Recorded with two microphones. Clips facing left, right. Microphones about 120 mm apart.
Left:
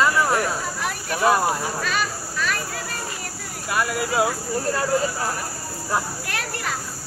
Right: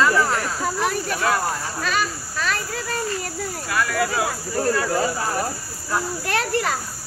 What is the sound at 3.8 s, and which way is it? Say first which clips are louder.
Speech: even; 20° left (ahead or behind).